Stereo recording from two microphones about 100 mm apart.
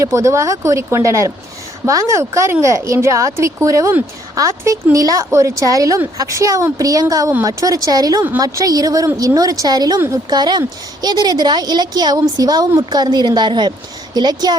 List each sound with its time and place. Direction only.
0.0 s a woman's voice: 30° right (ahead or behind)